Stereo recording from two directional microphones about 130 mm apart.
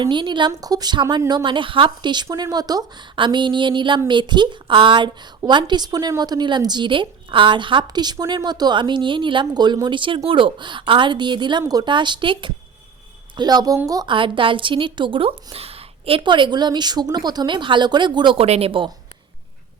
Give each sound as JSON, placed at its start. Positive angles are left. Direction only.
{"t": 0.0, "sound": "a woman's voice", "side_deg": -40}
{"t": 14.1, "sound": "speech", "side_deg": -40}
{"t": 18.4, "sound": "speech", "side_deg": -50}